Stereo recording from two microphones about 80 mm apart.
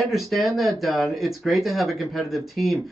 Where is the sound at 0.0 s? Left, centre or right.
Centre.